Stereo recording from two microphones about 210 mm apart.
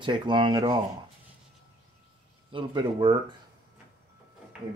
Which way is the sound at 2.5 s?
25° right (ahead or behind).